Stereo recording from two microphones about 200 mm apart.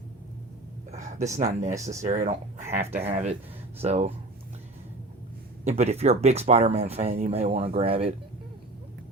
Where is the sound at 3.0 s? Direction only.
30° right (ahead or behind).